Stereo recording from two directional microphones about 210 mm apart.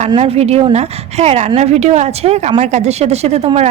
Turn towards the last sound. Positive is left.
turn(degrees=-30)  # may be behind; listen again after turning